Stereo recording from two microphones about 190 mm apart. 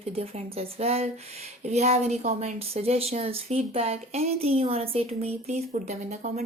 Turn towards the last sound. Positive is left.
turn(degrees=-40)  # may be behind; listen again after turning